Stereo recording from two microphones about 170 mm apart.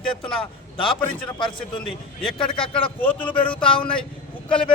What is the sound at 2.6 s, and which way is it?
Speech, 30° left (ahead or behind).